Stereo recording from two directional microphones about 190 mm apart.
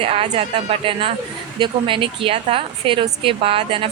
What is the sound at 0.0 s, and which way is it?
A woman's voice, 30° right (ahead or behind).